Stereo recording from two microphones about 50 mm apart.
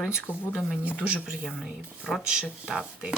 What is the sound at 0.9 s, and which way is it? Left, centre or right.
Speech, right.